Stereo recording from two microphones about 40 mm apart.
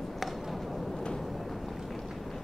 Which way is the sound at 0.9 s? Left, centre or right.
Centre.